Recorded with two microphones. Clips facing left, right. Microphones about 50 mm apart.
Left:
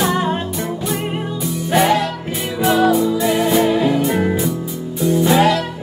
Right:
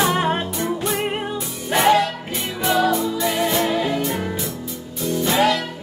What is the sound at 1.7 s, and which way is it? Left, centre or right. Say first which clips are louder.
Music: left 1 dB; centre.